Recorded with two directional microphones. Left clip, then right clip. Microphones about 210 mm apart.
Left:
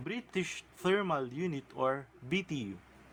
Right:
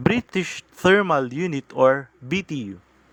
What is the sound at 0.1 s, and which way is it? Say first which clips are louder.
Speech: right 13 dB; 35° right (ahead or behind).